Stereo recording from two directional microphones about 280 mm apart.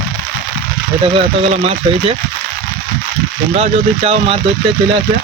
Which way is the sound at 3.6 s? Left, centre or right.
Right.